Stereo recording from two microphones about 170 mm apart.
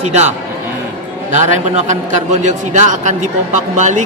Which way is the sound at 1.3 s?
45° right (ahead or behind).